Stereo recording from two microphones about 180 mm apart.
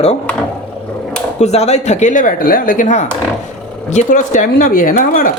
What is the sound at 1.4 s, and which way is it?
Speech, 35° left (ahead or behind).